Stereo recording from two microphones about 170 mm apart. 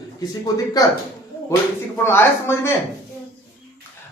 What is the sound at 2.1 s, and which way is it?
Speech, 15° left (ahead or behind).